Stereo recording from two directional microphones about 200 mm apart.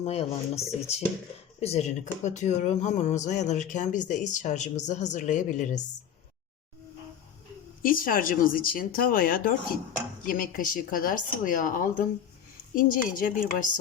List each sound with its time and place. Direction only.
0.0 s speech: 30° left (ahead or behind)
7.8 s speech: 45° left (ahead or behind)